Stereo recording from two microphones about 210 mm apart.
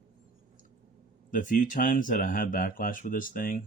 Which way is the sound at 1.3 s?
40° left (ahead or behind).